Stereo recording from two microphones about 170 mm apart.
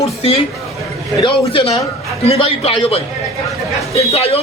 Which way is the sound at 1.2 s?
30° left (ahead or behind).